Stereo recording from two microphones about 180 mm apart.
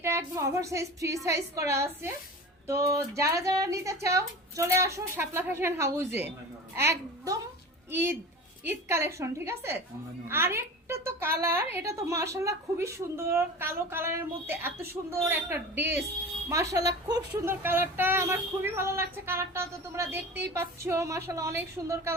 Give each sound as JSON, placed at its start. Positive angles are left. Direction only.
{"t": 0.0, "sound": "a child's voice", "side_deg": -15}